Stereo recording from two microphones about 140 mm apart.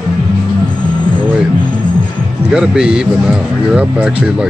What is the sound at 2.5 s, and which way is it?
Speech, 5° right (ahead or behind).